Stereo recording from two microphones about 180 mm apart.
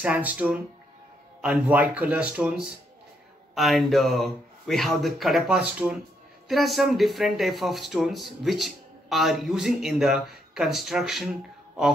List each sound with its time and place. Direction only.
0.0 s speech: 10° right (ahead or behind)